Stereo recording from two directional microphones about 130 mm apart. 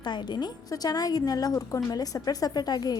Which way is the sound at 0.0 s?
35° left (ahead or behind).